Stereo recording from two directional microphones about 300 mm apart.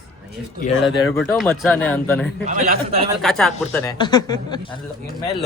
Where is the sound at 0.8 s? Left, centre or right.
Centre.